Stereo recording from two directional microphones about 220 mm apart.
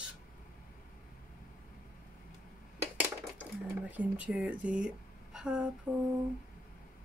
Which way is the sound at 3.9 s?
5° right (ahead or behind).